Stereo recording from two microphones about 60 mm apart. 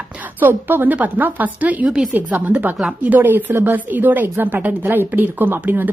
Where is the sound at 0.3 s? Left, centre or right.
Right.